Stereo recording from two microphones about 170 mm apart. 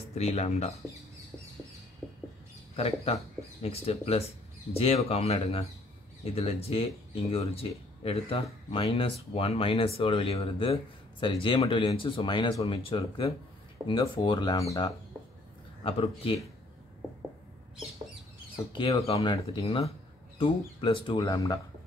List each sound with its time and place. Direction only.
0.1 s speech: 40° left (ahead or behind)
2.7 s speech: 35° left (ahead or behind); by 15.0 s 20° left (ahead or behind)
15.8 s speech: 30° left (ahead or behind)
18.7 s speech: 30° left (ahead or behind)